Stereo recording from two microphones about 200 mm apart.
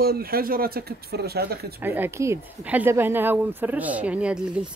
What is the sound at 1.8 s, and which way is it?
Speech, 10° right (ahead or behind).